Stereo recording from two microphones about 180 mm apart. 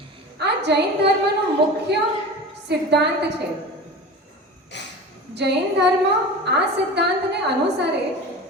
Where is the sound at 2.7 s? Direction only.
70° right (ahead or behind).